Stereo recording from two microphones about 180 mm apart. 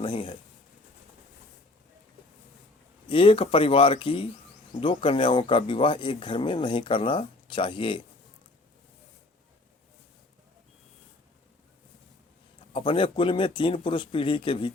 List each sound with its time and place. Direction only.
0.0 s speech: 25° left (ahead or behind)
3.1 s speech: 30° left (ahead or behind)
12.7 s speech: 30° left (ahead or behind)